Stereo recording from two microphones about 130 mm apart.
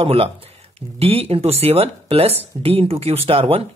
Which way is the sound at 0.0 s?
50° right (ahead or behind).